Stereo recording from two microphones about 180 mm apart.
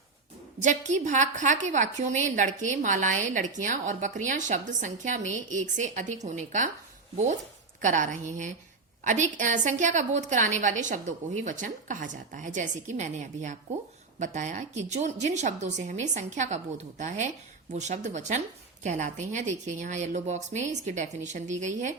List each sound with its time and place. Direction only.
0.6 s a woman's voice: 45° right (ahead or behind)
7.8 s a woman's voice: 45° right (ahead or behind)